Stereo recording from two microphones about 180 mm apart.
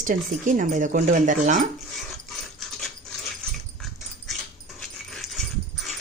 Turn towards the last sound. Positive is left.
turn(degrees=0)  # may be behind; listen again after turning